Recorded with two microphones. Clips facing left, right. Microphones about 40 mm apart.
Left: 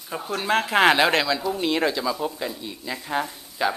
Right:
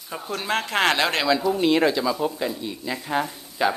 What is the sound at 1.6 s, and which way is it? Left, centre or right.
Speech, right.